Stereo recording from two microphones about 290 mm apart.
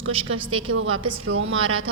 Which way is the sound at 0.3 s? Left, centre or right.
Right.